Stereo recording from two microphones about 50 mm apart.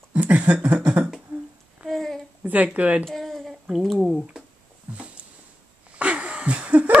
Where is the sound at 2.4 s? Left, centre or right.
Right.